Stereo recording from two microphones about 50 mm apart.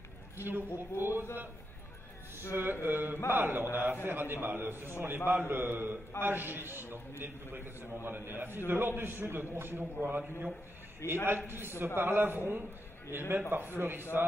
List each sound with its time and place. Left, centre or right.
0.4 s a man's voice: right
2.5 s a man's voice: right
10.0 s a man's voice: right
11.2 s a man's voice: right